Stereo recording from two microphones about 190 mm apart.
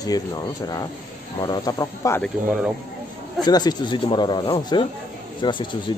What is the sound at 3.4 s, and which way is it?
Speech, 20° left (ahead or behind).